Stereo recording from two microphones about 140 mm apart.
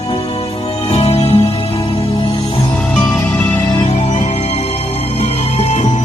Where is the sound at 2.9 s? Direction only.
5° left (ahead or behind).